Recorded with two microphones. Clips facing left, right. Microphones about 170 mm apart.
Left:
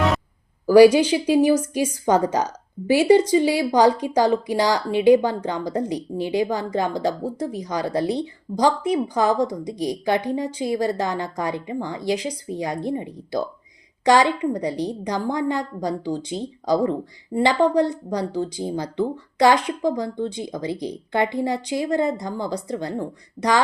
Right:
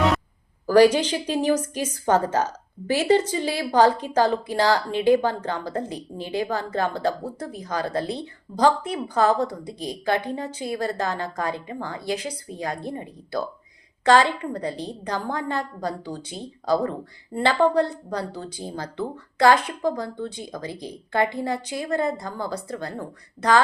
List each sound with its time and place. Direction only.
0.7 s a woman's voice: 10° left (ahead or behind)